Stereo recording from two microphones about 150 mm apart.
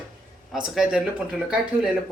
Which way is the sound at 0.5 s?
5° right (ahead or behind).